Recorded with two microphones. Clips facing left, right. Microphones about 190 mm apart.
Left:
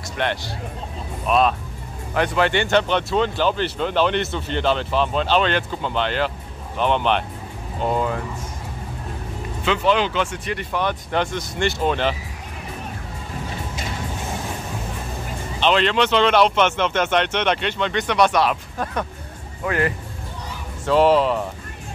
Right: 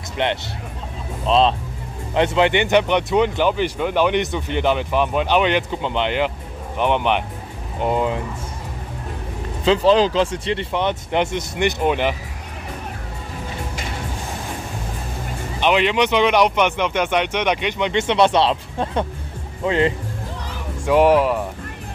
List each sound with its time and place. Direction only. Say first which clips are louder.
0.2 s speech: right 2 dB; 20° right (ahead or behind)
9.7 s speech: right 5 dB; 35° right (ahead or behind); by 12.2 s 15° right (ahead or behind)
15.6 s speech: right 1 dB; 15° right (ahead or behind)